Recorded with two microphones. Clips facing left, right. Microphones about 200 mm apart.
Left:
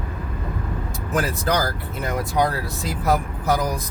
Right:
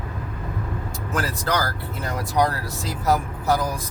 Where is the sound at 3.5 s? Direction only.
15° left (ahead or behind).